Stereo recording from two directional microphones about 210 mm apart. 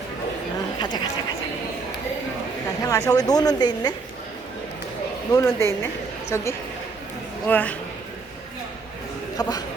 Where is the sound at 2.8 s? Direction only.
15° left (ahead or behind).